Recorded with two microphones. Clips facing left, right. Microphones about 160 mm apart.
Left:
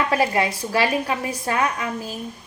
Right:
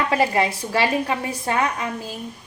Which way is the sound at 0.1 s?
25° right (ahead or behind).